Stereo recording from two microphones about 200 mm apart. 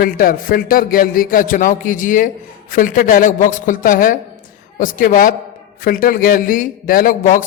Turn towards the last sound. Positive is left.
turn(degrees=40)  # may be behind; listen again after turning